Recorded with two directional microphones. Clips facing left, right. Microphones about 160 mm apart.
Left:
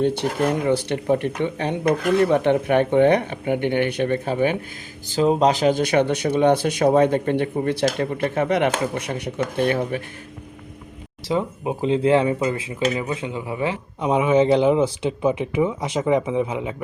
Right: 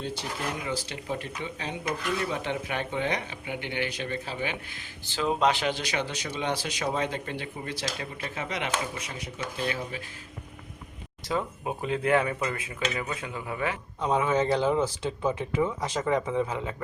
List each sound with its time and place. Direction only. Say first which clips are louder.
0.0 s speech: left 13 dB; 60° left (ahead or behind)
5.0 s speech: left 8 dB; 40° left (ahead or behind); by 10.0 s 60° left (ahead or behind)
11.3 s speech: left 7 dB; 20° left (ahead or behind)